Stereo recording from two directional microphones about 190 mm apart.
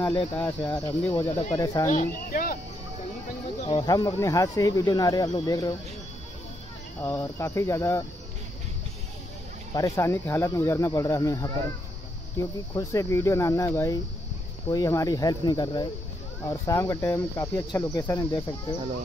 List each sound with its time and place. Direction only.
0.4 s speech: 10° left (ahead or behind)
1.3 s speech: 35° left (ahead or behind)
1.6 s speech: 20° left (ahead or behind)
1.9 s speech: 45° left (ahead or behind)
3.6 s speech: 20° left (ahead or behind)
7.0 s speech: 15° left (ahead or behind)
9.8 s speech: 15° left (ahead or behind)
12.7 s speech: 15° left (ahead or behind)